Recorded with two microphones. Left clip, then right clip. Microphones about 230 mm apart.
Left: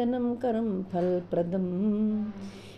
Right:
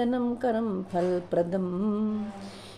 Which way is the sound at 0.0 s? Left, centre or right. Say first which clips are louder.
Right 1 dB; centre.